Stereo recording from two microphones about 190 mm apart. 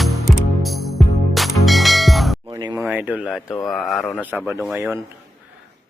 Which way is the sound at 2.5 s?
20° right (ahead or behind).